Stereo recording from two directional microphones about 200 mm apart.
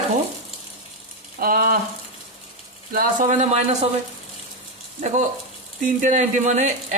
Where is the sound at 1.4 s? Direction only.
45° right (ahead or behind).